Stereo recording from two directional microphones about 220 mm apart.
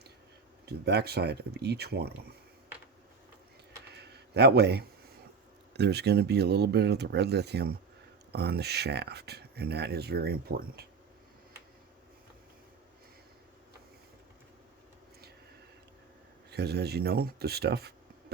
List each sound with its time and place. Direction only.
0.6 s speech: 50° right (ahead or behind)
3.9 s a sound: 50° right (ahead or behind)
5.7 s speech: 50° right (ahead or behind)
16.5 s speech: 50° right (ahead or behind)